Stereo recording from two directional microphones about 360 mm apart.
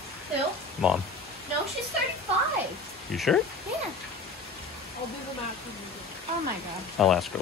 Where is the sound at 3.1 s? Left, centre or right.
Centre.